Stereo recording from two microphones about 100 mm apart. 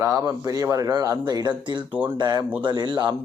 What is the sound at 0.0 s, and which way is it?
Speech, 35° right (ahead or behind).